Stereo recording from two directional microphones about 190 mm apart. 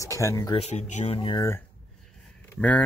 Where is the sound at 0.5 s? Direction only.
35° left (ahead or behind).